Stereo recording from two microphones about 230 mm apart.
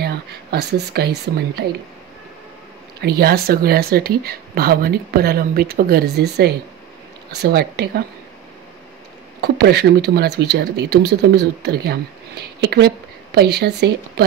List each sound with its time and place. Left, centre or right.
0.0 s speech: right
3.0 s speech: right
9.4 s speech: right